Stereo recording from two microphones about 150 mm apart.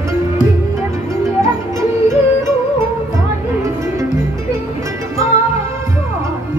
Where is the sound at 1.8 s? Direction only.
20° right (ahead or behind).